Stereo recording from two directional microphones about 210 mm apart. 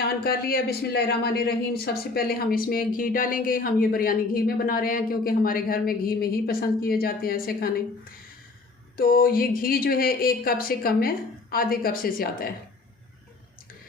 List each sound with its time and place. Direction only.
0.0 s speech: 45° left (ahead or behind)
9.0 s speech: 45° left (ahead or behind)